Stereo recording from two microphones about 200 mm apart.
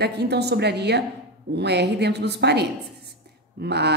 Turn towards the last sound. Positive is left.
turn(degrees=-55)  # may be behind; listen again after turning